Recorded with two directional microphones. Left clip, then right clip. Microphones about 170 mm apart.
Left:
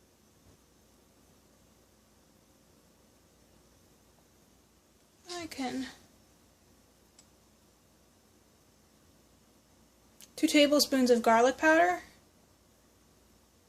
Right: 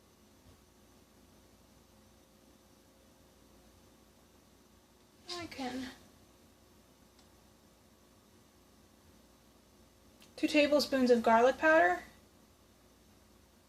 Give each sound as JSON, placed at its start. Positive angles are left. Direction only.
{"t": 5.2, "sound": "a woman's voice", "side_deg": 40}
{"t": 10.3, "sound": "speech", "side_deg": 50}